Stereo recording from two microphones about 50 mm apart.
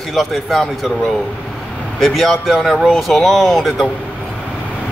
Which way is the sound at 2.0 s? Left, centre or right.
Centre.